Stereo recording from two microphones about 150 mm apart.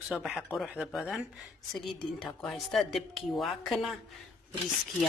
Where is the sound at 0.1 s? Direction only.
5° right (ahead or behind).